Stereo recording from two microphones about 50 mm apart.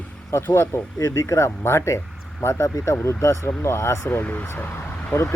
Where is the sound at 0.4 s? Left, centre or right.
Left.